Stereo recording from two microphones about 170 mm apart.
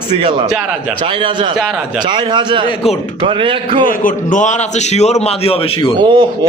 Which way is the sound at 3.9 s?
50° left (ahead or behind).